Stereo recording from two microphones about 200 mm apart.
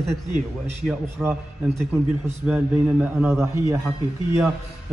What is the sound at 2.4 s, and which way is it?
A man's voice, 5° right (ahead or behind).